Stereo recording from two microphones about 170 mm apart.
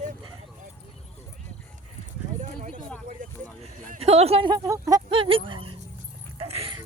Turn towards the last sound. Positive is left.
turn(degrees=-35)  # may be behind; listen again after turning